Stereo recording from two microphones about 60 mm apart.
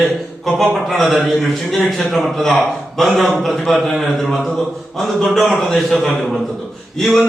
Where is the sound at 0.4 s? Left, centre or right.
Centre.